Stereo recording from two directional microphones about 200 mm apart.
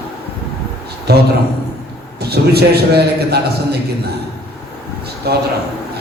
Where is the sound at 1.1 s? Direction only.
55° right (ahead or behind).